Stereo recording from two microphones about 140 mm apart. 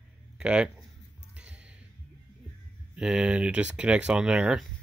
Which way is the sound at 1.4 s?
10° right (ahead or behind).